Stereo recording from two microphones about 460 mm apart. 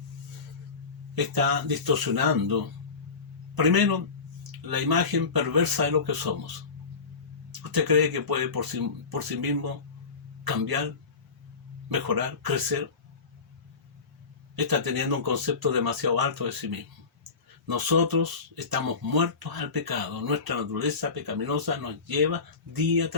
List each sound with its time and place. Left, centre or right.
1.1 s speech: right
7.6 s speech: right
11.9 s speech: right
14.5 s speech: right